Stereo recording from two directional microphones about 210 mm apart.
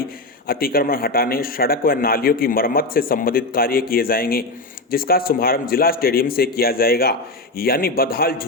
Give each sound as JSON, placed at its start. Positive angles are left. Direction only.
{"t": 0.4, "sound": "a man's voice", "side_deg": 45}